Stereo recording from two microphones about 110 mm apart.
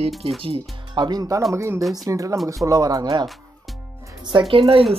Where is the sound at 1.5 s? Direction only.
25° right (ahead or behind).